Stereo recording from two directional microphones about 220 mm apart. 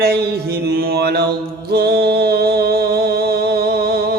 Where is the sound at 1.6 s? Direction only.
45° right (ahead or behind).